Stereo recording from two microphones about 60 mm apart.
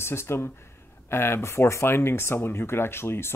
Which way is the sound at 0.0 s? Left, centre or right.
Left.